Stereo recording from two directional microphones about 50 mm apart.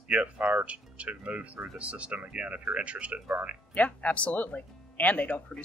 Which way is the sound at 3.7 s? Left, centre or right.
Left.